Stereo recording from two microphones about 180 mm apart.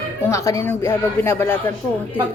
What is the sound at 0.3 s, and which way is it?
Speech, 15° left (ahead or behind).